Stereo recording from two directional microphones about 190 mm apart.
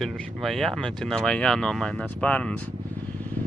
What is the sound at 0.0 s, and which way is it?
Speech, centre (ahead or behind).